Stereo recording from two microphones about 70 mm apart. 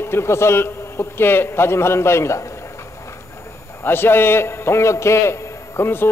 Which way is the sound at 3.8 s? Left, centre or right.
Left.